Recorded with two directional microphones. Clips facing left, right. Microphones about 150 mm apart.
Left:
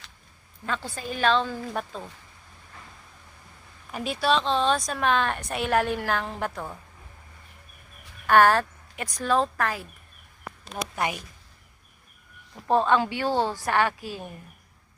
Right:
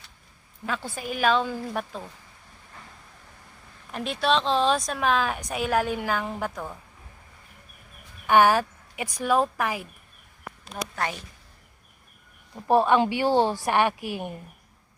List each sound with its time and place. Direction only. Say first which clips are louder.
0.6 s a woman's voice: even; 5° right (ahead or behind)
3.9 s a woman's voice: even; 5° left (ahead or behind)
8.3 s speech: even; 5° right (ahead or behind)
10.9 s a woman's voice: left 2 dB; 15° left (ahead or behind)
12.5 s a woman's voice: right 2 dB; 15° right (ahead or behind)